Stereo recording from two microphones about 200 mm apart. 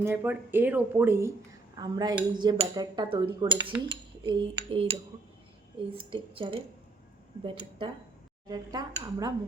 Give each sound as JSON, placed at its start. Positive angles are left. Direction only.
{"t": 0.0, "sound": "speech", "side_deg": -10}
{"t": 3.8, "sound": "cutlery", "side_deg": -25}
{"t": 5.9, "sound": "speech", "side_deg": -25}